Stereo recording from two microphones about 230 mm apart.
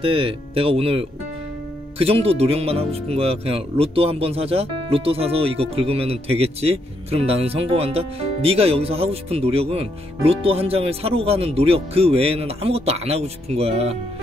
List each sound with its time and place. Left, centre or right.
0.0 s speech: right